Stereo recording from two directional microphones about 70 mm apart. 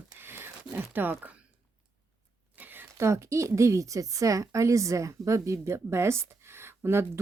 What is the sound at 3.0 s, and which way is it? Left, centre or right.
A woman's voice, right.